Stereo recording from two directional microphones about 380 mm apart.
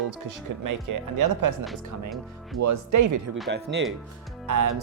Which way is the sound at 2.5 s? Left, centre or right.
Right.